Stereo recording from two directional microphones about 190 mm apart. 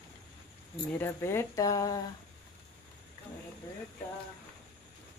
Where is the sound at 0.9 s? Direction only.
10° left (ahead or behind).